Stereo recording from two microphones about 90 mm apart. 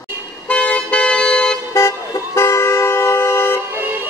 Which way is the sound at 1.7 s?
35° left (ahead or behind).